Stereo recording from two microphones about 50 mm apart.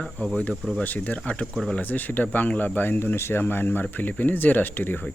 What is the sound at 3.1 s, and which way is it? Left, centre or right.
Speech, left.